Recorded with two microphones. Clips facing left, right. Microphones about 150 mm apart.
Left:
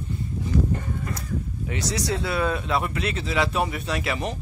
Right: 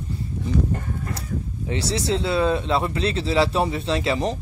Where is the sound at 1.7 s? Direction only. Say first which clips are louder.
Right 4 dB; 30° right (ahead or behind).